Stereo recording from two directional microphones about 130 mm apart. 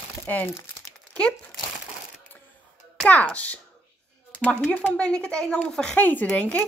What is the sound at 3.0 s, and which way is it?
Speech, 10° left (ahead or behind).